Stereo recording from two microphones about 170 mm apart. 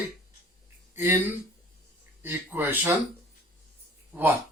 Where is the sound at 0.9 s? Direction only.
15° right (ahead or behind).